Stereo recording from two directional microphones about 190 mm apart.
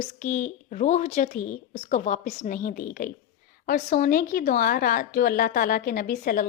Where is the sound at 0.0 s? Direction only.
40° left (ahead or behind).